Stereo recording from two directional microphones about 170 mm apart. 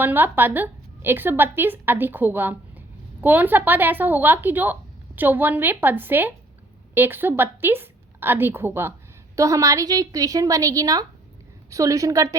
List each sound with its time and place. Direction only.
0.0 s a woman's voice: 10° right (ahead or behind)